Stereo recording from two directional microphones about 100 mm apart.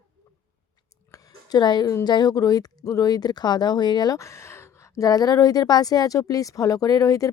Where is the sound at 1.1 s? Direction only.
35° left (ahead or behind).